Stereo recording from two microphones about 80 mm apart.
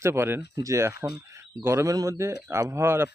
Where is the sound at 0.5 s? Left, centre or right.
Right.